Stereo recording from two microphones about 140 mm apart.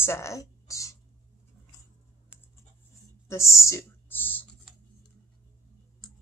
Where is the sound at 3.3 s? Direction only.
20° left (ahead or behind).